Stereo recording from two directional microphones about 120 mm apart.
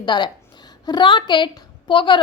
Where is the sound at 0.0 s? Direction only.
40° left (ahead or behind).